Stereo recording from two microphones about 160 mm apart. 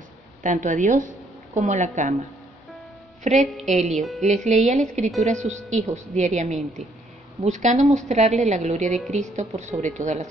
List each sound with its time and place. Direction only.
0.4 s a woman's voice: 55° right (ahead or behind)
3.3 s a woman's voice: 45° right (ahead or behind)